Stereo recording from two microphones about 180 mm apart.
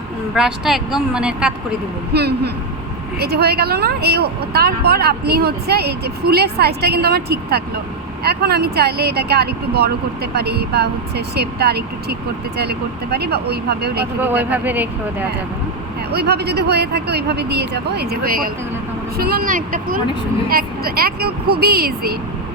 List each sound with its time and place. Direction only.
0.3 s speech: 5° right (ahead or behind)
2.1 s a woman's voice: 65° right (ahead or behind)
14.2 s speech: 10° right (ahead or behind)
16.1 s a woman's voice: 65° right (ahead or behind)